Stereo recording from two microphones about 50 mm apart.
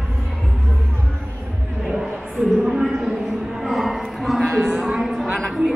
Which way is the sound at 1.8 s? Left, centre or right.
Centre.